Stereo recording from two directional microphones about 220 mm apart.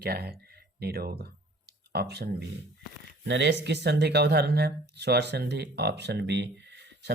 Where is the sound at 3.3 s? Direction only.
50° right (ahead or behind).